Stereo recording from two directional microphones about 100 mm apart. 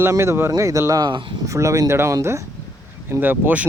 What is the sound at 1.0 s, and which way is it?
Speech, 50° right (ahead or behind).